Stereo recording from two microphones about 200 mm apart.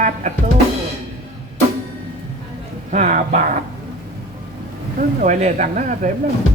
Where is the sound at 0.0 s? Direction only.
40° right (ahead or behind).